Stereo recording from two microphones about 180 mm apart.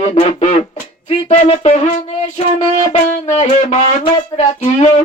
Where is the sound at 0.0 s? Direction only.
35° left (ahead or behind).